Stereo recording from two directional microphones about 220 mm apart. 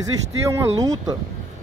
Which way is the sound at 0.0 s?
15° right (ahead or behind).